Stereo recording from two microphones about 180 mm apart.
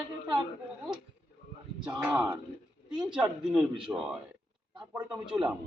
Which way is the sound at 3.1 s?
5° right (ahead or behind).